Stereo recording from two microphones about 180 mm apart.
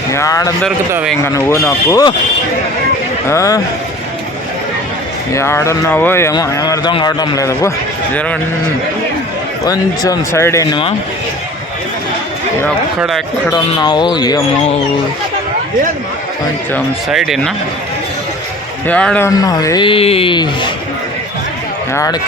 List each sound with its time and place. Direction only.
0.1 s speech: 15° left (ahead or behind)
3.2 s speech: 15° left (ahead or behind)
5.3 s speech: 15° left (ahead or behind)
9.6 s speech: 20° left (ahead or behind)
13.0 s speech: centre (ahead or behind)
13.5 s speech: 25° left (ahead or behind)
17.1 s speech: centre (ahead or behind)
18.9 s speech: 5° left (ahead or behind)
19.3 s speech: 20° left (ahead or behind)